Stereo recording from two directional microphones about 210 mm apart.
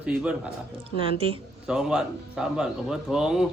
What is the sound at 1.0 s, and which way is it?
Speech, 25° right (ahead or behind).